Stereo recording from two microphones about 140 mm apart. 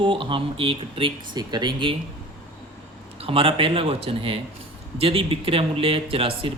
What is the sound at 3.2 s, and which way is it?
Speech, 40° right (ahead or behind).